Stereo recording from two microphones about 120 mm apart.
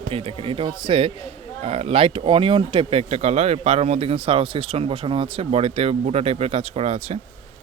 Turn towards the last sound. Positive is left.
turn(degrees=-60)  # may be behind; listen again after turning